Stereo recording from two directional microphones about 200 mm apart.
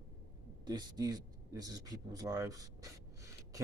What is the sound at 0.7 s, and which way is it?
A man's voice, 20° right (ahead or behind).